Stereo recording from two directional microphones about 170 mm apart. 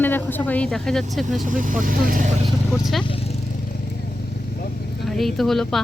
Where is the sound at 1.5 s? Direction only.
50° right (ahead or behind).